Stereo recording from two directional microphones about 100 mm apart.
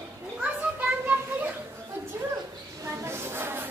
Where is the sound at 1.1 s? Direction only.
20° right (ahead or behind).